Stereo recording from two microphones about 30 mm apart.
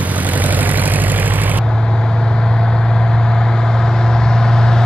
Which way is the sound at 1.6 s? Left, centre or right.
Left.